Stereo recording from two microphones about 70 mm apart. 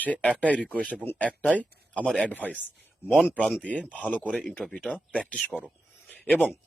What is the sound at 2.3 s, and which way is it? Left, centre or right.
Speech, left.